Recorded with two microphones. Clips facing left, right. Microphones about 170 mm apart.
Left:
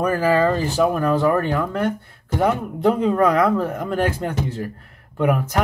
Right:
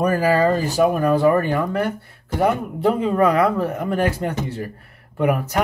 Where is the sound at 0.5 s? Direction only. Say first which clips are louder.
Right 1 dB; 40° right (ahead or behind).